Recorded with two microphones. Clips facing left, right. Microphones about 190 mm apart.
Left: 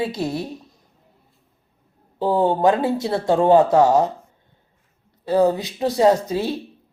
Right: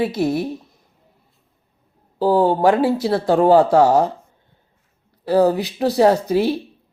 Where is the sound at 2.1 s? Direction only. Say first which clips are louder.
Right 3 dB; centre (ahead or behind).